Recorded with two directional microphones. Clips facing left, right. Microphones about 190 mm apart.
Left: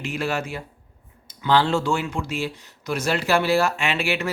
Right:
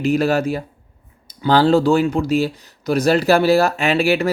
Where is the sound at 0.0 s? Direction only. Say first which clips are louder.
Right 10 dB; 35° right (ahead or behind).